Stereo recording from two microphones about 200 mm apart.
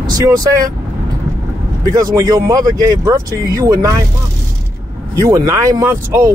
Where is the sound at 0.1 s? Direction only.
20° right (ahead or behind).